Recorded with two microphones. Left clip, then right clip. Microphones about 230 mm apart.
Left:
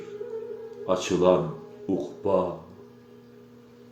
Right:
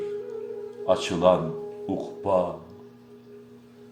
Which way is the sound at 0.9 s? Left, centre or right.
Right.